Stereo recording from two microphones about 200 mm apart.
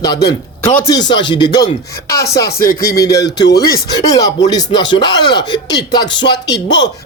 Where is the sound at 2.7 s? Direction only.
50° left (ahead or behind).